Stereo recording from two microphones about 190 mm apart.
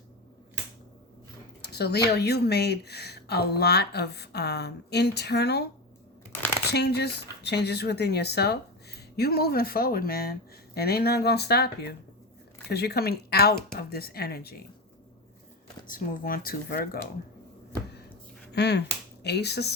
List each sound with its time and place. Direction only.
1.6 s speech: 60° left (ahead or behind)
6.7 s speech: 60° left (ahead or behind)
15.9 s speech: 45° left (ahead or behind)
18.5 s speech: 60° left (ahead or behind)